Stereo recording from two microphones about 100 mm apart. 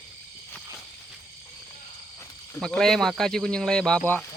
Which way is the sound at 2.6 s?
5° left (ahead or behind).